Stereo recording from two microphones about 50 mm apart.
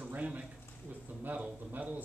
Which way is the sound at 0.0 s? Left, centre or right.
Right.